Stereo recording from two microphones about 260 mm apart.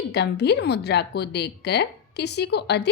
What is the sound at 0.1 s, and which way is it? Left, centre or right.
A woman's voice, left.